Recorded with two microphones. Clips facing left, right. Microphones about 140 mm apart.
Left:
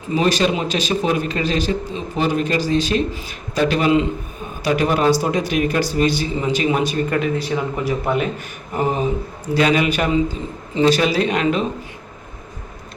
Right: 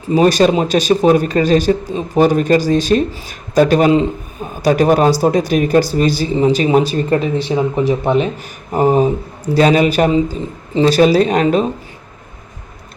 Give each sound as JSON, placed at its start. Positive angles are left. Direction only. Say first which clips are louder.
{"t": 0.1, "sound": "a man's voice", "louder": "right 7 dB", "side_deg": -40}
{"t": 8.7, "sound": "a man's voice", "louder": "right 7 dB", "side_deg": -40}